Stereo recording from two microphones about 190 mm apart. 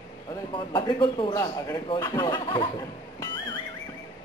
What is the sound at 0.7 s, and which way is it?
A man's voice, 25° left (ahead or behind).